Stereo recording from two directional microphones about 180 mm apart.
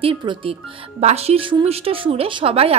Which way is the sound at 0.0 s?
30° right (ahead or behind).